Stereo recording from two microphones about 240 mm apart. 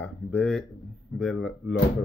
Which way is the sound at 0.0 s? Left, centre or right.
Centre.